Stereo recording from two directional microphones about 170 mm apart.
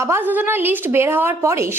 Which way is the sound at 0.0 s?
15° right (ahead or behind).